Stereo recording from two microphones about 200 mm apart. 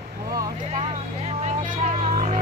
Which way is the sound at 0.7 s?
30° right (ahead or behind).